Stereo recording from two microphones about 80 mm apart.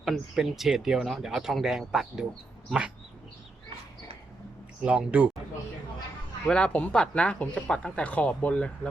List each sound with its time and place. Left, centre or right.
0.0 s speech: centre
4.8 s speech: centre
6.5 s speech: centre